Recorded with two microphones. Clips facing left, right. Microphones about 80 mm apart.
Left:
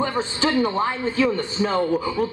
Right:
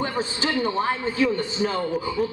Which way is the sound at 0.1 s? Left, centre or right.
Left.